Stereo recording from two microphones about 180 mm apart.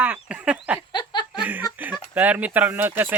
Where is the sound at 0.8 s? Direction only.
25° left (ahead or behind).